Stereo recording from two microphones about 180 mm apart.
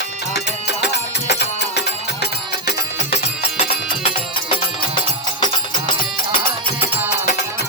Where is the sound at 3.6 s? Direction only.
35° left (ahead or behind).